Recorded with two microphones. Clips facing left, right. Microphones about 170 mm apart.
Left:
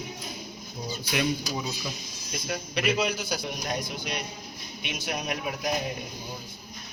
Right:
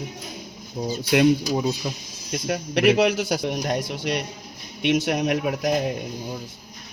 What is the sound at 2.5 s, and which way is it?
A man's voice, 75° right (ahead or behind).